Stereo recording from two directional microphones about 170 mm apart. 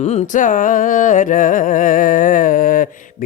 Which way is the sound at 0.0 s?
40° left (ahead or behind).